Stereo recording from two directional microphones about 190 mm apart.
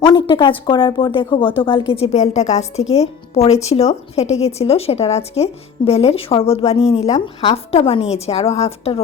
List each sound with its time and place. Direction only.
0.0 s a woman's voice: 25° left (ahead or behind)